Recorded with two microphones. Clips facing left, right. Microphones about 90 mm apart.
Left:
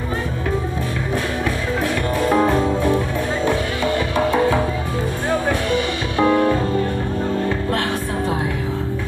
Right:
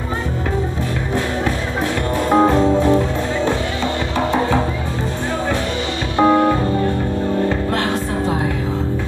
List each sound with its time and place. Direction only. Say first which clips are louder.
2.1 s music: right 3 dB; 25° right (ahead or behind)
6.1 s music: right 3 dB; 25° right (ahead or behind)